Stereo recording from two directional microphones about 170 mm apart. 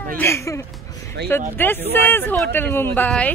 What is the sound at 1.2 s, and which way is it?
Speech, 90° right.